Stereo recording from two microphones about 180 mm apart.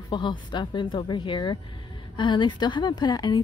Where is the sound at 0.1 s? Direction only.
25° left (ahead or behind).